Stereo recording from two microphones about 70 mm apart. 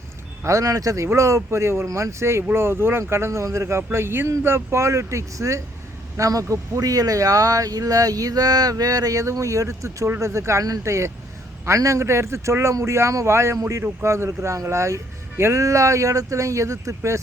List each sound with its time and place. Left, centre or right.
0.4 s speech: right